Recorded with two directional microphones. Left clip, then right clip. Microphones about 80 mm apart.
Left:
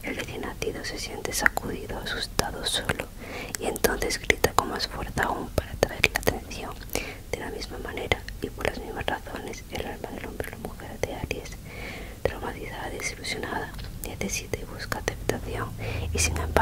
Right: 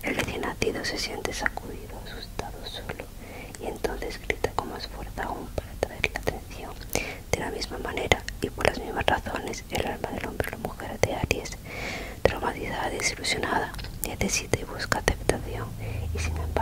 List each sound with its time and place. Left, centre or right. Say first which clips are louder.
0.0 s whispering: right 4 dB; right
2.0 s speech: left 9 dB; left
5.6 s whispering: left 5 dB; centre
7.2 s whispering: right 4 dB; right
16.2 s whispering: left 8 dB; left